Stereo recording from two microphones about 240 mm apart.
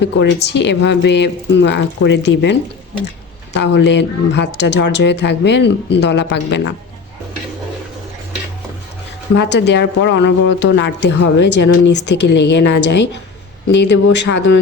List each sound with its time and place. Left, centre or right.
0.0 s speech: left
9.3 s speech: left